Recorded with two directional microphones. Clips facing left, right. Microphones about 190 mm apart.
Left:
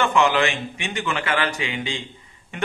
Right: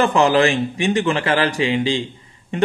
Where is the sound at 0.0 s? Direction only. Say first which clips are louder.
Right 5 dB; 35° right (ahead or behind).